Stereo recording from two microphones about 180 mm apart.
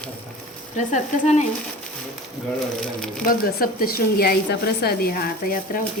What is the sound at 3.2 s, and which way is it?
Speech, 50° left (ahead or behind).